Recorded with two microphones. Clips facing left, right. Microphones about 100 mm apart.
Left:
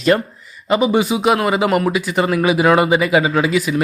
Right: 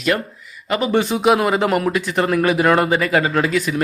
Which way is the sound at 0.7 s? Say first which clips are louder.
Left 3 dB; 15° left (ahead or behind).